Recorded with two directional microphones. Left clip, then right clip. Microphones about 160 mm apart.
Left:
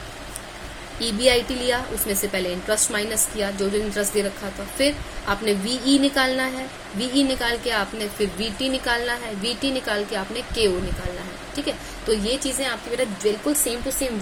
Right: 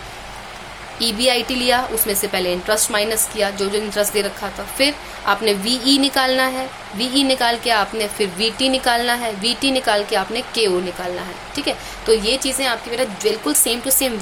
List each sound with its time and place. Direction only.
0.9 s speech: 20° right (ahead or behind)